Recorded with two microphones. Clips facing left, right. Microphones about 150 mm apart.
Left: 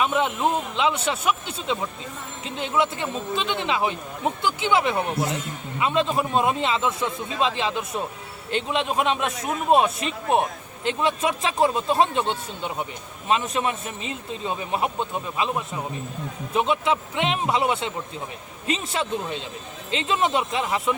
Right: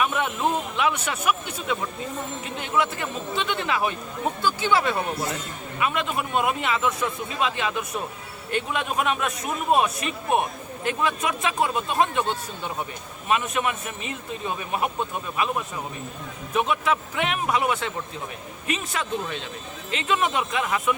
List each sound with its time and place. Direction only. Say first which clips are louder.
0.0 s speech: left 2 dB; 20° left (ahead or behind)